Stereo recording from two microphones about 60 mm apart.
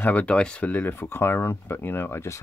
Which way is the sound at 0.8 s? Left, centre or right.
Left.